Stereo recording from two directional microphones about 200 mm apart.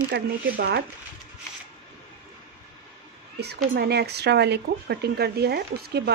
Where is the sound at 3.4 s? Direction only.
55° right (ahead or behind).